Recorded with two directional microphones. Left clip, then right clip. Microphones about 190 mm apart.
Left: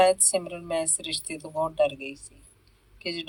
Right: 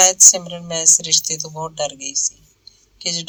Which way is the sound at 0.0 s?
20° right (ahead or behind).